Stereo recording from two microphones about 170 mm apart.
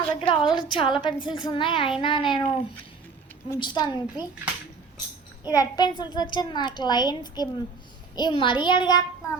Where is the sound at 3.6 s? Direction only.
25° left (ahead or behind).